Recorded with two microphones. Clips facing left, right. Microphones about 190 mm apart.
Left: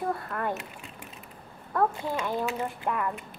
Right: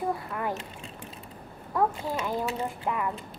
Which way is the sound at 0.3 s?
5° right (ahead or behind).